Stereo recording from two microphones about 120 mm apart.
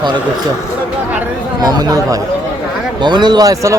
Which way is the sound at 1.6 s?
35° right (ahead or behind).